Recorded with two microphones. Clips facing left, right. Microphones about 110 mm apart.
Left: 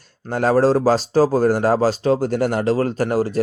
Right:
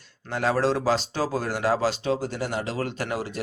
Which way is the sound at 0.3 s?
45° left (ahead or behind).